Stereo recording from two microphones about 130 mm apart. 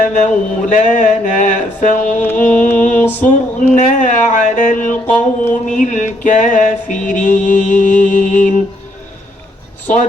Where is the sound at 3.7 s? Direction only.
70° left (ahead or behind).